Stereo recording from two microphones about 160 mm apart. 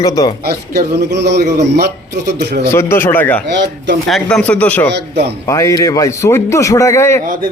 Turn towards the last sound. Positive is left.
turn(degrees=15)  # may be behind; listen again after turning